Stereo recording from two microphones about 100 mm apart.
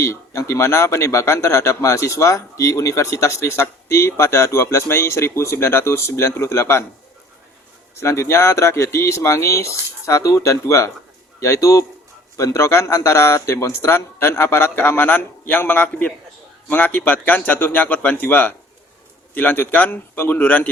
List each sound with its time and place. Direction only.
0.0 s a man's voice: 25° left (ahead or behind)
7.9 s a man's voice: 30° left (ahead or behind)